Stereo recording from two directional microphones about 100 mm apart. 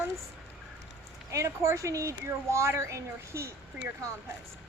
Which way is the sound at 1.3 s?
30° right (ahead or behind).